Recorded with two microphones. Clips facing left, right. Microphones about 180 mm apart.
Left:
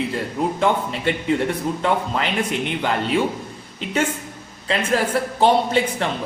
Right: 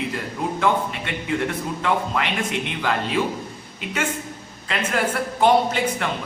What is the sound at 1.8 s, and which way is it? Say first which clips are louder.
Speech: right 1 dB; 30° left (ahead or behind).